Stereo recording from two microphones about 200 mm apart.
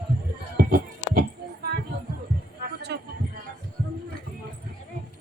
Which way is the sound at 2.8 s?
55° right (ahead or behind).